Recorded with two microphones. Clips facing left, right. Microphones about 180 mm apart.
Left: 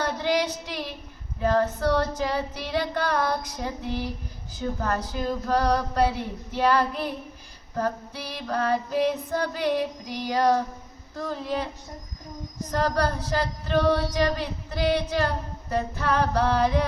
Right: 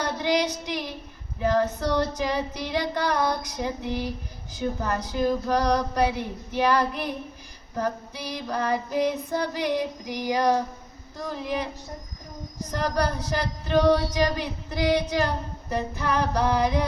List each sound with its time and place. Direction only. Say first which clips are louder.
0.0 s child singing: even; 15° right (ahead or behind)
1.4 s female singing: even; 15° right (ahead or behind)
12.7 s female singing: left 1 dB; 15° right (ahead or behind)